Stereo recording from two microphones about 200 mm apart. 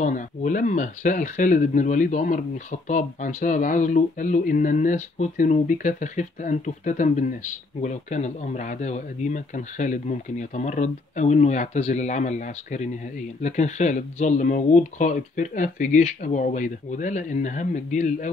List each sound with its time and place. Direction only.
0.0 s speech: 40° left (ahead or behind)